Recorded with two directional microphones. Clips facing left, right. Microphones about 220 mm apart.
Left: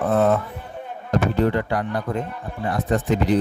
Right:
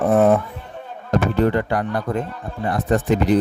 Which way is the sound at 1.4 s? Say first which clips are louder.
Right 2 dB; 50° right (ahead or behind).